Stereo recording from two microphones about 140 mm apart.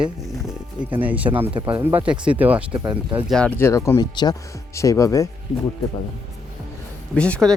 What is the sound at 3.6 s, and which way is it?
Speech, 20° left (ahead or behind).